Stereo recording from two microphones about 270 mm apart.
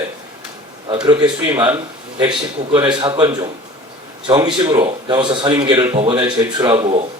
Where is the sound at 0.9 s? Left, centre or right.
Centre.